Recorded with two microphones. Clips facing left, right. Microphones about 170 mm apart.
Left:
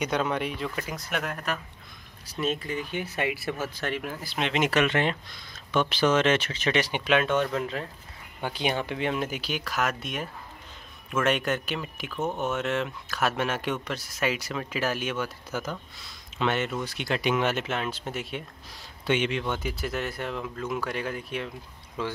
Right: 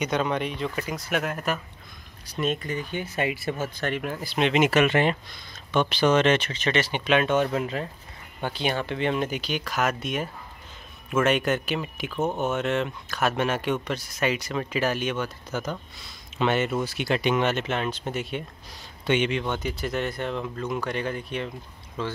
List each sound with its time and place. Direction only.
0.0 s speech: 5° left (ahead or behind)
3.2 s speech: 30° right (ahead or behind)
3.8 s speech: centre (ahead or behind)
7.2 s speech: 5° right (ahead or behind)
8.4 s speech: 10° left (ahead or behind)
12.1 s speech: 20° right (ahead or behind)
12.4 s speech: centre (ahead or behind)